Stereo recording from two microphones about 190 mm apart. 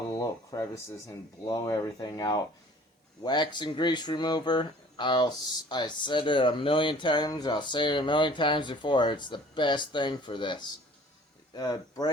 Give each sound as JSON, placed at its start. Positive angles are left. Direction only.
{"t": 0.1, "sound": "speech", "side_deg": 20}